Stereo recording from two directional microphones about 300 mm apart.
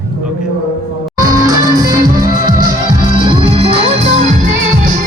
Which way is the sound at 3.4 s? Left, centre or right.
Centre.